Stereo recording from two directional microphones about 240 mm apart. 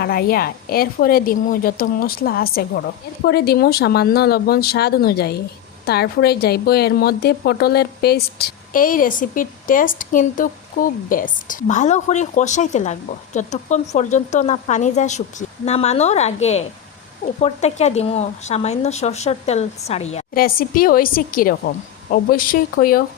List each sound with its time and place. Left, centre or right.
0.0 s a woman's voice: left